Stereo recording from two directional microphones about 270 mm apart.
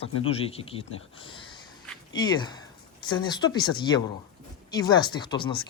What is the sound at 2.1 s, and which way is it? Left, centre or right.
Speech, centre.